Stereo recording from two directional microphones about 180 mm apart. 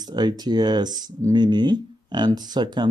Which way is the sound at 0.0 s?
25° right (ahead or behind).